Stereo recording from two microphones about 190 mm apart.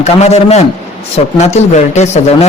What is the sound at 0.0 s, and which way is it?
Speech, 35° left (ahead or behind).